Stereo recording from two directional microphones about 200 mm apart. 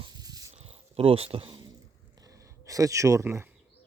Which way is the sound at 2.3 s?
15° right (ahead or behind).